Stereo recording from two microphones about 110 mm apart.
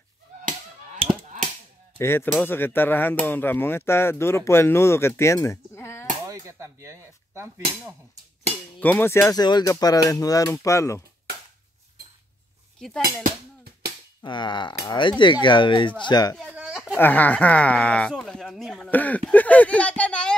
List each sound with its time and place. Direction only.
2.0 s speech: 20° left (ahead or behind)
6.2 s speech: 30° right (ahead or behind)
8.7 s a sound: 15° left (ahead or behind)
9.3 s speech: 40° left (ahead or behind)
12.7 s a sound: 5° left (ahead or behind)
14.2 s speech: 45° left (ahead or behind)
16.4 s a sound: 10° right (ahead or behind)
16.9 s speech: 15° left (ahead or behind)
18.9 s speech: 15° left (ahead or behind)